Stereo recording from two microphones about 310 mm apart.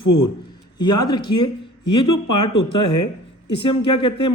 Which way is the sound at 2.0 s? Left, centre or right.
Left.